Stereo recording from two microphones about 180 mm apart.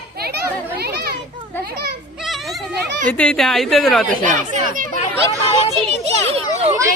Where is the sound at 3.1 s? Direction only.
5° left (ahead or behind).